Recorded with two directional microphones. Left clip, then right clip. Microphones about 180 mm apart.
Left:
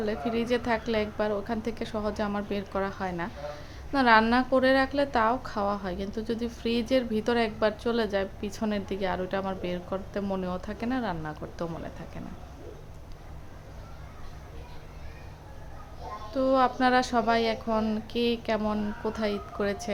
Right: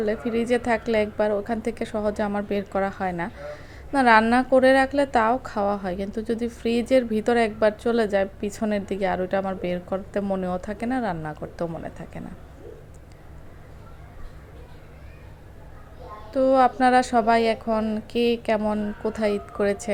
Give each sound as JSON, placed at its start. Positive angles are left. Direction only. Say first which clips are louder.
{"t": 0.0, "sound": "a woman's voice", "louder": "right 5 dB", "side_deg": -15}
{"t": 16.3, "sound": "speech", "louder": "right 6 dB", "side_deg": -20}